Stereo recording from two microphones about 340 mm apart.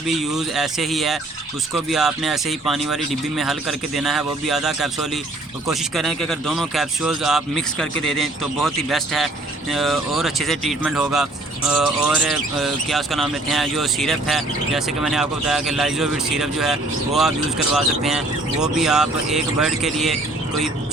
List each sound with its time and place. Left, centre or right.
0.2 s speech: centre
17.7 s speech: centre